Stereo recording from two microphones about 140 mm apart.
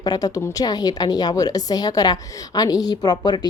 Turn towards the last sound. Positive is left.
turn(degrees=30)  # may be behind; listen again after turning